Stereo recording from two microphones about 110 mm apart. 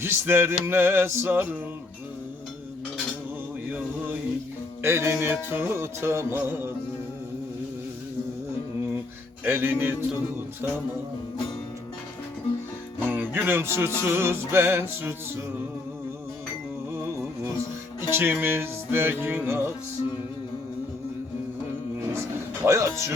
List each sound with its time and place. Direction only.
0.0 s music: 20° right (ahead or behind)
4.8 s music: 20° right (ahead or behind)
9.4 s music: 20° right (ahead or behind)
13.1 s music: 15° right (ahead or behind)
18.1 s music: 20° right (ahead or behind)
22.6 s music: 25° right (ahead or behind)